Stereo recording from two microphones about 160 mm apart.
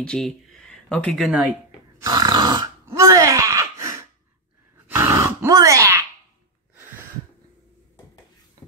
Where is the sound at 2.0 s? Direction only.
25° right (ahead or behind).